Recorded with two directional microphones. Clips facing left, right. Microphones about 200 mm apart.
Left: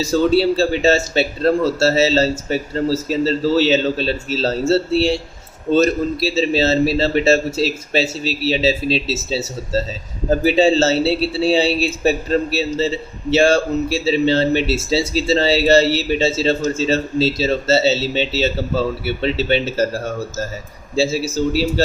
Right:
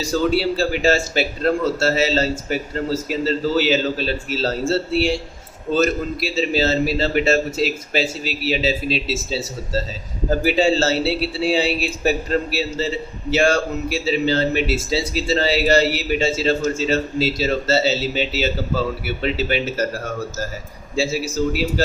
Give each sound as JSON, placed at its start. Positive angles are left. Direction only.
{"t": 0.0, "sound": "a man's voice", "side_deg": 25}